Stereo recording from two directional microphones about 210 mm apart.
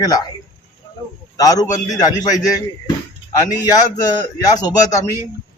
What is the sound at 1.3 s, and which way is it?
A man's voice, 15° left (ahead or behind).